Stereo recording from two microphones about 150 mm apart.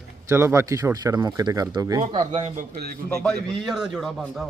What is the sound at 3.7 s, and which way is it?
Speech, 5° right (ahead or behind).